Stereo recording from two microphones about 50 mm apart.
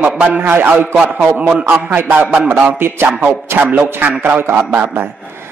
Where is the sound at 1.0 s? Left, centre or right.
Right.